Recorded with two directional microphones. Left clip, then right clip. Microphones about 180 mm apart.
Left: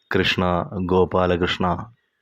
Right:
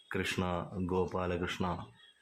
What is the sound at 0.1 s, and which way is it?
Speech, 35° left (ahead or behind).